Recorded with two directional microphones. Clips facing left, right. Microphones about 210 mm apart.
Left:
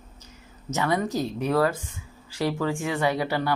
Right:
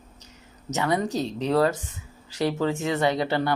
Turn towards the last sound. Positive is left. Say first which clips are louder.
# right 2 dB
turn(degrees=-25)  # may be behind; listen again after turning